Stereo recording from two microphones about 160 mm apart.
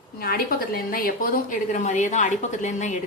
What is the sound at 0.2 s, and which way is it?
A woman's voice, 70° left (ahead or behind).